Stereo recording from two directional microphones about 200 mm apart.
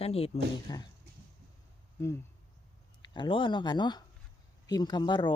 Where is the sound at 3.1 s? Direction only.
25° left (ahead or behind).